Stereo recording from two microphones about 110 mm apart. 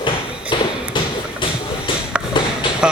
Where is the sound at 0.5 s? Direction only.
45° left (ahead or behind).